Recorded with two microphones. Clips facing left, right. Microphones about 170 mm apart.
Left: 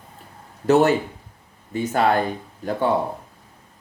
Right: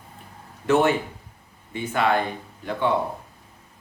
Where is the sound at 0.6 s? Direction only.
40° left (ahead or behind).